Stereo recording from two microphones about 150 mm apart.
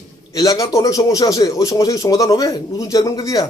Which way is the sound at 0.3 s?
25° left (ahead or behind).